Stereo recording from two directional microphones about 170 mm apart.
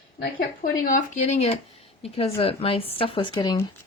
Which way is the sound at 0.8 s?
50° left (ahead or behind).